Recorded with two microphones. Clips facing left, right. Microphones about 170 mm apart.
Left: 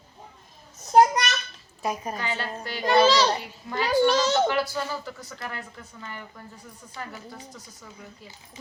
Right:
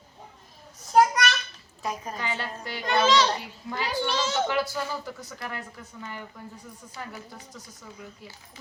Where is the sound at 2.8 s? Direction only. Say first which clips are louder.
Left 3 dB; 35° left (ahead or behind).